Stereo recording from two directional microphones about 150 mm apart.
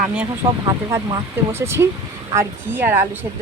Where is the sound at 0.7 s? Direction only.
20° right (ahead or behind).